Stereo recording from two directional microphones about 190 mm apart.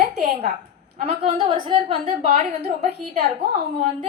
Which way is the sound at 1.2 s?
30° right (ahead or behind).